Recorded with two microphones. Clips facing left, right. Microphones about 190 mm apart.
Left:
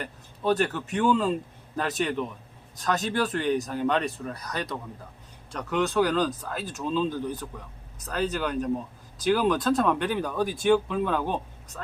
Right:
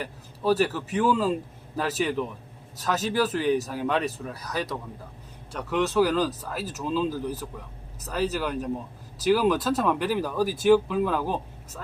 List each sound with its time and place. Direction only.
0.0 s speech: 5° right (ahead or behind)